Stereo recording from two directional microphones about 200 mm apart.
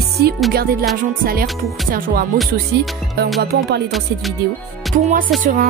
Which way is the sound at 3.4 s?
55° right (ahead or behind).